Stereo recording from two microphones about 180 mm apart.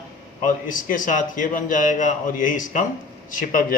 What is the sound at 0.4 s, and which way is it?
A man's voice, 45° left (ahead or behind).